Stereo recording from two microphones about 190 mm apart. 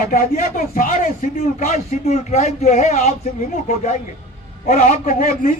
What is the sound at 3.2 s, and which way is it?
A man's voice, 50° left (ahead or behind).